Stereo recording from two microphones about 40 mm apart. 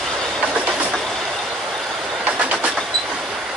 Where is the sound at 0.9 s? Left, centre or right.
Centre.